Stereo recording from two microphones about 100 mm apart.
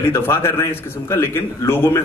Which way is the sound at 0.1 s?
25° left (ahead or behind).